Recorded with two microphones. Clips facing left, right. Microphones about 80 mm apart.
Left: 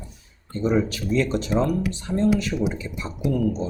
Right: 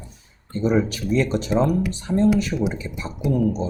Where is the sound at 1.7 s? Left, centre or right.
Right.